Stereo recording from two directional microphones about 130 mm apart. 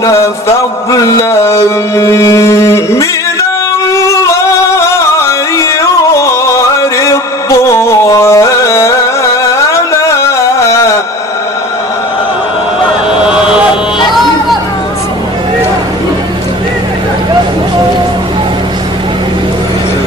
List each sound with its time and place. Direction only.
0.9 s mantra: 25° left (ahead or behind)
3.9 s a sound: 25° left (ahead or behind)
5.6 s music: 25° left (ahead or behind)